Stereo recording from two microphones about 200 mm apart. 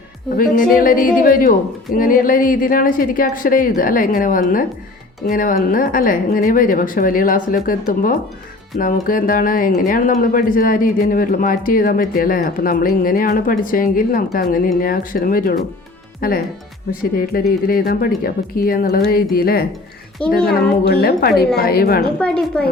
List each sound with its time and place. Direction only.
0.7 s speech: 45° left (ahead or behind)
22.2 s a woman's voice: 5° left (ahead or behind)